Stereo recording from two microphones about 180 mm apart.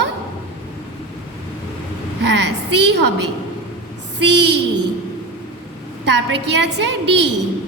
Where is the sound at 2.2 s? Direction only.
75° right (ahead or behind).